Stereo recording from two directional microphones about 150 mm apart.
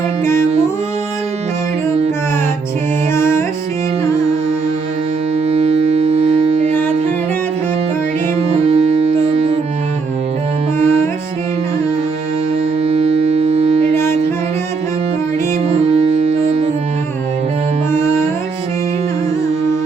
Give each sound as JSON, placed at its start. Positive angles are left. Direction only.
{"t": 5.5, "sound": "music", "side_deg": -45}
{"t": 8.4, "sound": "music", "side_deg": -45}
{"t": 12.8, "sound": "music", "side_deg": -45}
{"t": 13.9, "sound": "music", "side_deg": 15}
{"t": 15.9, "sound": "music", "side_deg": -45}